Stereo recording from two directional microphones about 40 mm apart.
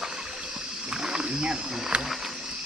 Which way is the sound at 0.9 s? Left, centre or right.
Right.